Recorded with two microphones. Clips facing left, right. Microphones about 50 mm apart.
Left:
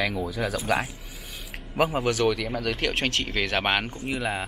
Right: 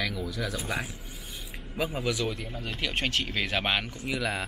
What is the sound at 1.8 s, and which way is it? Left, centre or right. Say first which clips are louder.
Speech: left 7 dB; left.